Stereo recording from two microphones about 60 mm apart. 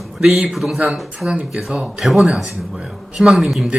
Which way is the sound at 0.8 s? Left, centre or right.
Centre.